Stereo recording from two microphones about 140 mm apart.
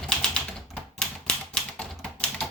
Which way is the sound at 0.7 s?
5° left (ahead or behind).